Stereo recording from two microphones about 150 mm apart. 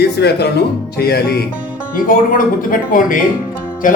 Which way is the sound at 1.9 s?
70° left (ahead or behind).